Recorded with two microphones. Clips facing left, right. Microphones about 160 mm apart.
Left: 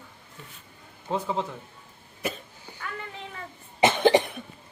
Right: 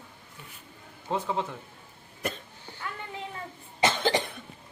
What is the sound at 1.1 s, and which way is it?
Speech, centre (ahead or behind).